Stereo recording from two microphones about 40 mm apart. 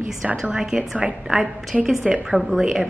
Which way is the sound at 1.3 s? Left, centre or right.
Centre.